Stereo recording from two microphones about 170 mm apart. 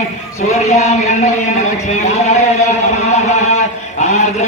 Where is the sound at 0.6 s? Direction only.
40° left (ahead or behind).